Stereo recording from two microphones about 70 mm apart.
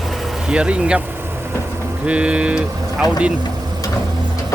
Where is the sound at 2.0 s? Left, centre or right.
Centre.